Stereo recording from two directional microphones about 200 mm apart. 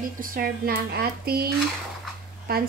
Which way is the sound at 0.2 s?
45° right (ahead or behind).